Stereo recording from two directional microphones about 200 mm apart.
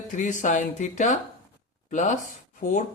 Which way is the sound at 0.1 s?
40° left (ahead or behind).